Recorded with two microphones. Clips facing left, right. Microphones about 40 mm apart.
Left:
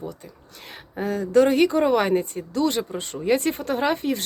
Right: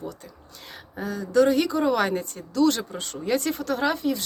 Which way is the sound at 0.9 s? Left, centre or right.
Left.